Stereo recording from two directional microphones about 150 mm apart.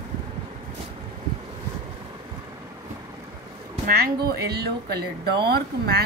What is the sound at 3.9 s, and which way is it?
Speech, 90° right.